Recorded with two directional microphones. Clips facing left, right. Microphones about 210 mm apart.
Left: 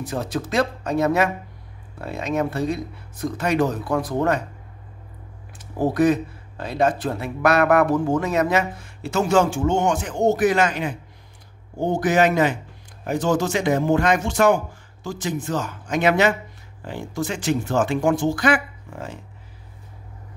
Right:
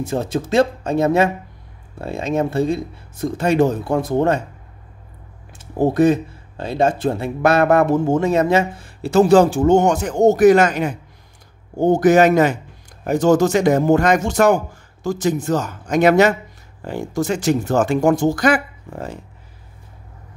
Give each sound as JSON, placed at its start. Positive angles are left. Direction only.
{"t": 0.0, "sound": "speech", "side_deg": -25}
{"t": 5.5, "sound": "a man's voice", "side_deg": -25}